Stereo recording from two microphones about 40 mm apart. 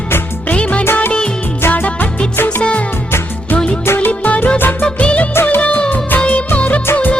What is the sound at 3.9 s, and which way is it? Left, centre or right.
Music, left.